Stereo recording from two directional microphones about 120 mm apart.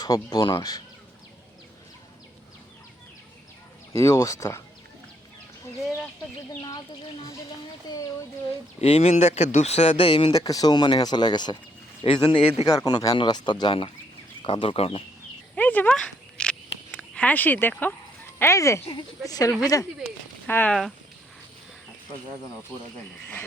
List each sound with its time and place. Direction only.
0.0 s speech: 35° left (ahead or behind)
3.9 s speech: 25° left (ahead or behind)
6.6 s speech: 35° left (ahead or behind)
8.8 s speech: 60° left (ahead or behind)
10.3 s speech: 30° left (ahead or behind)
12.6 s speech: 30° left (ahead or behind); by 15.0 s 55° left (ahead or behind)
15.5 s single-lens reflex camera: 15° left (ahead or behind)
18.3 s speech: 25° left (ahead or behind)
20.5 s speech: 15° left (ahead or behind)